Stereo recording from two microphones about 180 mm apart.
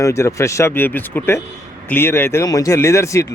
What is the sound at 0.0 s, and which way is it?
Speech, 15° left (ahead or behind).